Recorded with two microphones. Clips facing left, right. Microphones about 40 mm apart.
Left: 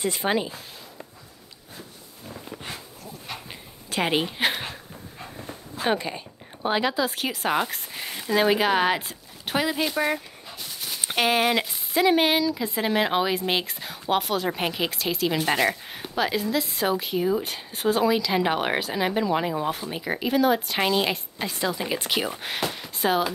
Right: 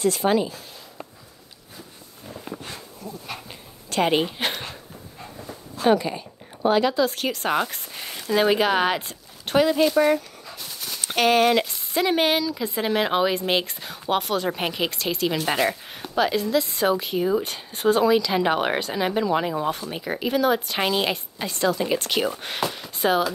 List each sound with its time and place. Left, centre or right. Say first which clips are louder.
0.0 s speech: right 4 dB; centre
3.4 s a sound: even; centre
6.0 s speech: right 3 dB; centre